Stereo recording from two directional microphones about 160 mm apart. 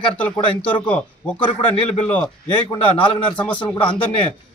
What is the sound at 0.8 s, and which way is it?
Speech, 5° left (ahead or behind).